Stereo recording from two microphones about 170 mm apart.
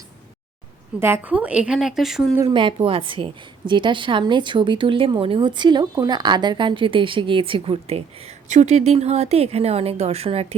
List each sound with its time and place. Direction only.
0.9 s a woman's voice: 15° right (ahead or behind)
2.5 s speech: 30° right (ahead or behind)